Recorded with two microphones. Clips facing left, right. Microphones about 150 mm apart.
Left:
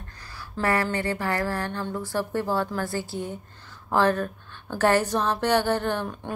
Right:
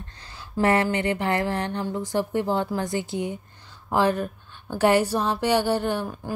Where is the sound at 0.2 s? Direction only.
20° right (ahead or behind).